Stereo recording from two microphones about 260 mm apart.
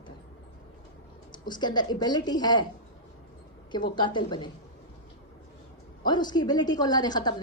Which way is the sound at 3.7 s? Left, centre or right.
Centre.